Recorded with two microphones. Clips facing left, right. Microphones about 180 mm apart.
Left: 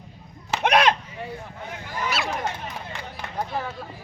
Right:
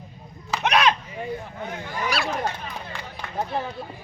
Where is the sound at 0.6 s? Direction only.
55° left (ahead or behind).